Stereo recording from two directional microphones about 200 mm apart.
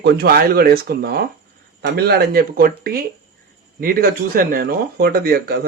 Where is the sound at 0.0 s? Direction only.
55° right (ahead or behind).